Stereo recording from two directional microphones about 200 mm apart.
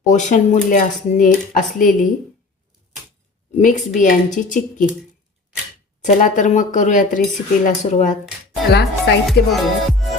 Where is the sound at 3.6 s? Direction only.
40° left (ahead or behind).